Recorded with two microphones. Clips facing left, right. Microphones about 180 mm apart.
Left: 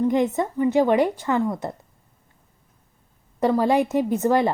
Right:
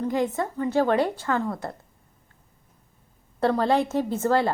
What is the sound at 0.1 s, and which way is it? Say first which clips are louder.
A woman's voice: left 4 dB; 20° left (ahead or behind).